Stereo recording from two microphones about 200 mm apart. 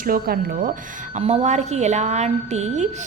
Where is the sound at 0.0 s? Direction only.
45° right (ahead or behind).